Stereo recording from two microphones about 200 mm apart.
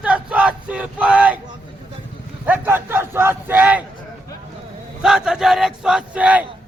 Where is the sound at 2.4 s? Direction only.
10° right (ahead or behind).